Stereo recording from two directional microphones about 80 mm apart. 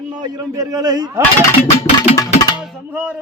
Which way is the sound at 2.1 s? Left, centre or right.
Left.